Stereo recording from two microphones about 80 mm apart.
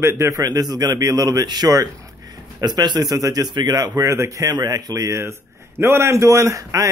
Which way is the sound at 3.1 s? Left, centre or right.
Right.